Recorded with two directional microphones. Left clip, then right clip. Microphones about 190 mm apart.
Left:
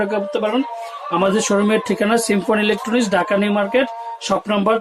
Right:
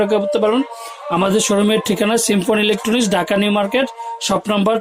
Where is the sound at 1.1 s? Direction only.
40° right (ahead or behind).